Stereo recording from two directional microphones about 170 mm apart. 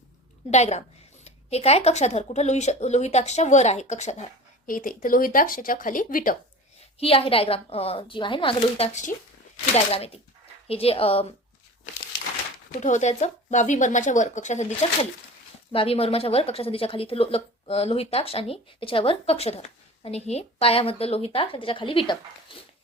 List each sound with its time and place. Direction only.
0.5 s speech: 40° left (ahead or behind)
7.0 s speech: 35° left (ahead or behind)
12.8 s speech: 45° left (ahead or behind); by 22.5 s 30° left (ahead or behind)